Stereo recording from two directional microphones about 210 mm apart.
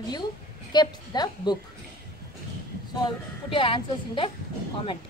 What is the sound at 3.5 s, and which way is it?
Speech, 25° left (ahead or behind).